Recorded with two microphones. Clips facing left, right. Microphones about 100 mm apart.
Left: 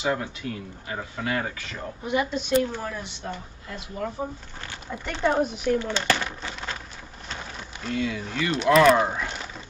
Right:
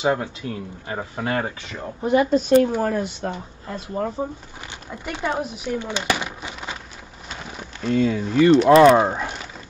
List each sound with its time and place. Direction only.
0.0 s speech: 30° right (ahead or behind)
4.6 s speech: 15° right (ahead or behind)
5.8 s a sound: 15° right (ahead or behind)
7.8 s speech: 40° right (ahead or behind)